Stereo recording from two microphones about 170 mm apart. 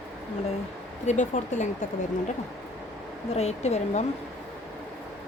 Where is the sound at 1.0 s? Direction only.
45° left (ahead or behind).